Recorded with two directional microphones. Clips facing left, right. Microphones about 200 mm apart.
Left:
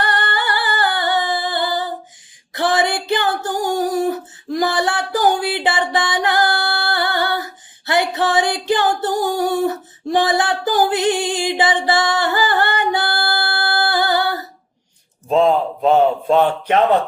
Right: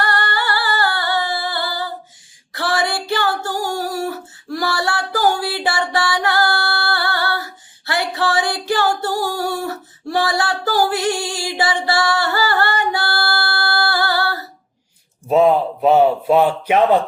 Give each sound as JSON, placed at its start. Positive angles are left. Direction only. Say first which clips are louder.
{"t": 0.0, "sound": "singing", "louder": "even", "side_deg": 20}
{"t": 2.5, "sound": "female singing", "louder": "left 3 dB", "side_deg": 20}
{"t": 15.3, "sound": "a man's voice", "louder": "right 1 dB", "side_deg": -10}